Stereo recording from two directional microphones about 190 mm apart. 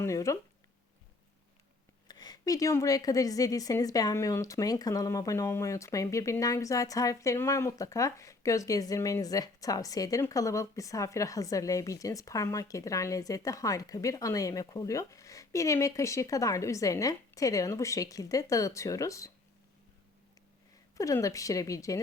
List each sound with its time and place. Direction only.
0.0 s a woman's voice: 15° left (ahead or behind)
2.0 s a woman's voice: 20° left (ahead or behind)
20.9 s a woman's voice: 15° left (ahead or behind)